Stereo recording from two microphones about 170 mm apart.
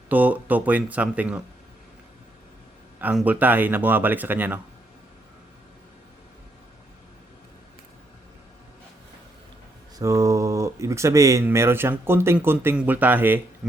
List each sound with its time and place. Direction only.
0.1 s speech: 10° right (ahead or behind)
3.0 s speech: 10° right (ahead or behind)
10.0 s speech: 20° right (ahead or behind)